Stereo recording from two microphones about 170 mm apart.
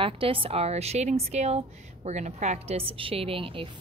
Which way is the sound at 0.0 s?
30° right (ahead or behind).